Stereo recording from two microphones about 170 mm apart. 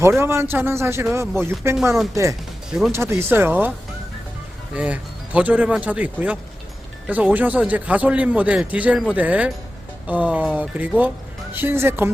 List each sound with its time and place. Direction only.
0.2 s a man's voice: 15° right (ahead or behind)
4.7 s a man's voice: 5° right (ahead or behind)